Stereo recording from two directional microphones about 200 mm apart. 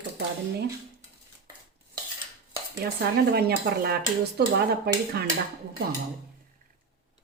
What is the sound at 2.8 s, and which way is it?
A woman's voice, 50° right (ahead or behind).